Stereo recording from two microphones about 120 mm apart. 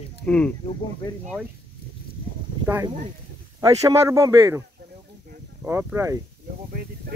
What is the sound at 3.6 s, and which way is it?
Speech, 25° right (ahead or behind).